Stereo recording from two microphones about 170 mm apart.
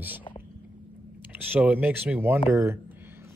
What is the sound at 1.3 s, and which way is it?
Speech, 10° right (ahead or behind).